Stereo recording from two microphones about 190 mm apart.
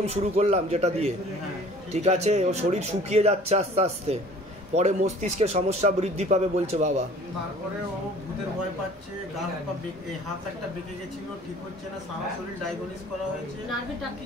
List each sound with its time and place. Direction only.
0.0 s speech: 35° right (ahead or behind)